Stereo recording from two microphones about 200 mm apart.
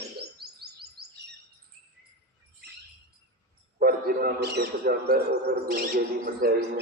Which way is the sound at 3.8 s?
50° right (ahead or behind).